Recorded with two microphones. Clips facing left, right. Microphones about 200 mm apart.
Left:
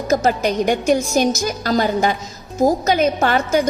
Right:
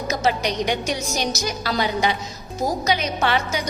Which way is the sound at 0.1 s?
50° left (ahead or behind).